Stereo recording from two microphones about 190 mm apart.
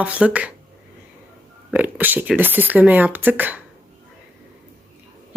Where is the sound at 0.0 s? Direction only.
5° right (ahead or behind).